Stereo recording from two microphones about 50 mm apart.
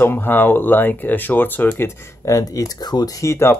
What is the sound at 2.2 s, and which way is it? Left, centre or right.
Speech, left.